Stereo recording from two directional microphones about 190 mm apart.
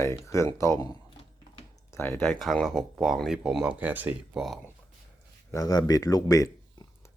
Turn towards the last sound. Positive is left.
turn(degrees=15)  # may be behind; listen again after turning